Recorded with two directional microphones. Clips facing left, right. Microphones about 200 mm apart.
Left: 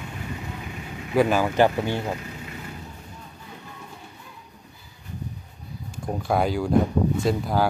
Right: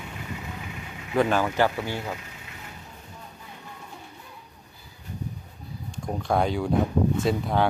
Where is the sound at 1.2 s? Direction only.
10° left (ahead or behind).